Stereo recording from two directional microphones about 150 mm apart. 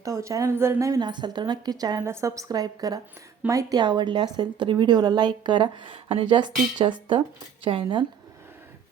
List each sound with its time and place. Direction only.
0.0 s a woman's voice: 20° right (ahead or behind)